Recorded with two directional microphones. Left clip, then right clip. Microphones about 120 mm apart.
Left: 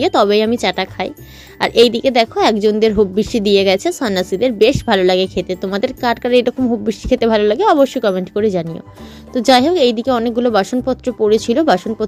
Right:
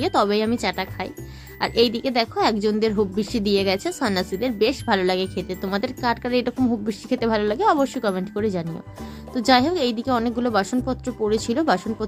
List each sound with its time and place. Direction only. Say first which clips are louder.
0.0 s speech: left 8 dB; 40° left (ahead or behind)